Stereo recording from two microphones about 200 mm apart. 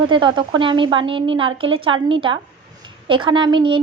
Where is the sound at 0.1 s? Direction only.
25° right (ahead or behind).